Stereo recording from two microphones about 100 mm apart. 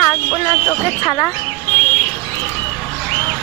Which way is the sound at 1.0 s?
35° left (ahead or behind).